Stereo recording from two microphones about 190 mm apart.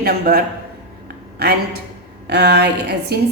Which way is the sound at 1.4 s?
55° right (ahead or behind).